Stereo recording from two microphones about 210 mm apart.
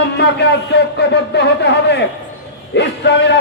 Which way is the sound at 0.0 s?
55° left (ahead or behind).